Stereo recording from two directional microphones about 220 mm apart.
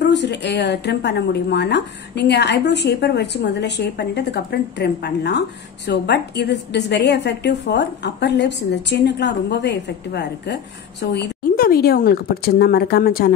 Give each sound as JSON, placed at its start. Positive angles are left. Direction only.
{"t": 0.0, "sound": "a woman's voice", "side_deg": 50}